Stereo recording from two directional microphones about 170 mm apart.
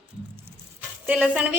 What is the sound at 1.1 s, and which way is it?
Speech, 10° right (ahead or behind).